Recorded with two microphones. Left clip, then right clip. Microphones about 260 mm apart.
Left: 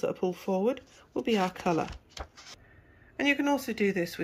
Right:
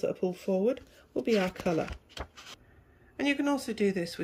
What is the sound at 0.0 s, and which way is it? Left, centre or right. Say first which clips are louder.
Speech: left 1 dB; centre.